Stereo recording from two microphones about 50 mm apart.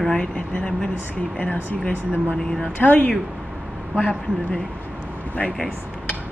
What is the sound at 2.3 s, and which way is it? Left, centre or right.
Speech, centre.